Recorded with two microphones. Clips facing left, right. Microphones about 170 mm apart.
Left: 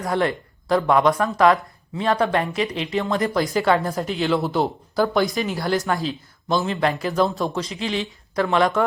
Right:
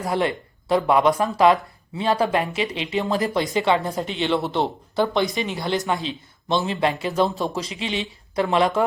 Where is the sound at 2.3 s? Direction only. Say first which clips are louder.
Left 1 dB; 5° right (ahead or behind).